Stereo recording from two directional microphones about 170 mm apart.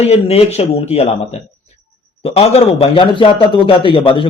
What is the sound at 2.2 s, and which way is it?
A man's voice, 35° left (ahead or behind).